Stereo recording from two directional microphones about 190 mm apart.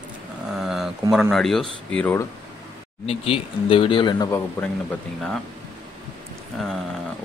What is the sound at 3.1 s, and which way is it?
Speech, 30° left (ahead or behind).